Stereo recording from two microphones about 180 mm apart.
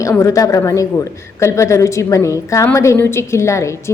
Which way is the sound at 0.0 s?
15° left (ahead or behind).